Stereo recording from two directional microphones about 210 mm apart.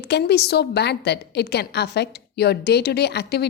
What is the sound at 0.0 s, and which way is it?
A woman's voice, 50° left (ahead or behind).